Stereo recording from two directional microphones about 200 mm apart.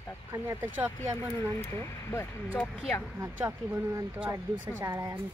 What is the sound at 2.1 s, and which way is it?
Speech, 10° left (ahead or behind).